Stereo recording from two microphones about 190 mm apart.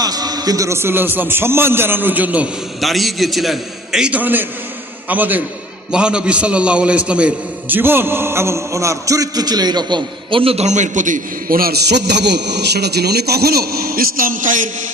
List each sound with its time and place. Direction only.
0.0 s a man's voice: 20° right (ahead or behind); by 14.6 s 45° right (ahead or behind)